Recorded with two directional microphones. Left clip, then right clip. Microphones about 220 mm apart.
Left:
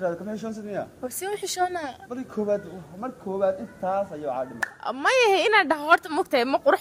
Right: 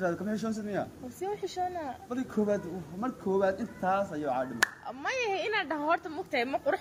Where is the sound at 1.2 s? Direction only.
45° left (ahead or behind).